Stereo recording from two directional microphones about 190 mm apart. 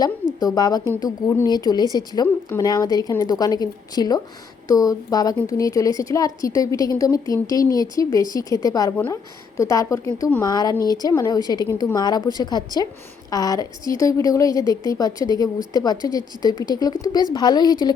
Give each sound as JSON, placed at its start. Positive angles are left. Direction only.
{"t": 0.3, "sound": "a woman's voice", "side_deg": 20}